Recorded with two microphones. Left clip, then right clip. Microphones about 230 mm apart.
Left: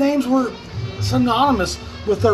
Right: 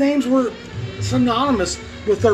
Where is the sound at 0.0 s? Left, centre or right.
Centre.